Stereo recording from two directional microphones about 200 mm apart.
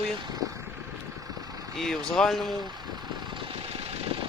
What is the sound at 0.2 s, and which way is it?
Speech, 20° right (ahead or behind).